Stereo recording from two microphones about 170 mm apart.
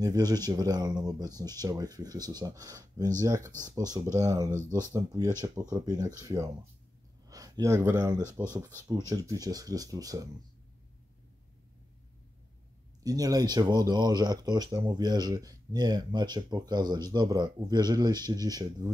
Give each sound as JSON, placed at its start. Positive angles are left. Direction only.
{"t": 0.0, "sound": "speech", "side_deg": -20}
{"t": 13.0, "sound": "speech", "side_deg": -20}